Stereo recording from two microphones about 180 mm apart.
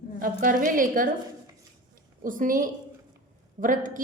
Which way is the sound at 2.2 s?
50° right (ahead or behind).